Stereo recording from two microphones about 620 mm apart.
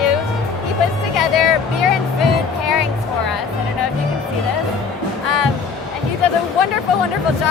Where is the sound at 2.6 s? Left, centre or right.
Left.